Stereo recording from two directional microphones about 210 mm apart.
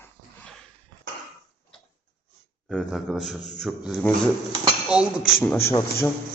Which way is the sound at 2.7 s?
Centre (ahead or behind).